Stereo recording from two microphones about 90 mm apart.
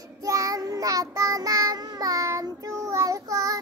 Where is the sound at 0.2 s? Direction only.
40° right (ahead or behind).